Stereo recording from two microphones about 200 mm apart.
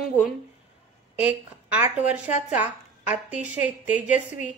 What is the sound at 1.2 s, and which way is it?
A woman's voice, 5° right (ahead or behind).